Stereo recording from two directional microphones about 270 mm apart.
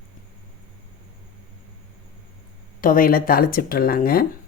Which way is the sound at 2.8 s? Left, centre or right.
Left.